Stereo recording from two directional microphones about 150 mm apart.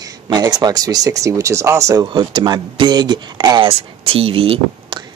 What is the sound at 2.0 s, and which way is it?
Speech, 30° right (ahead or behind).